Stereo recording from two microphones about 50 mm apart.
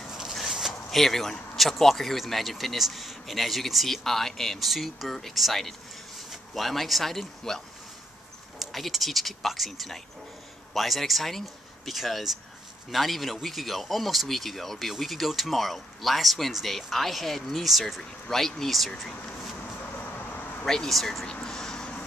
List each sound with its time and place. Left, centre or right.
0.3 s a sound: centre
0.8 s speech: centre
20.0 s vehicle: left
20.6 s speech: centre
21.3 s speech: centre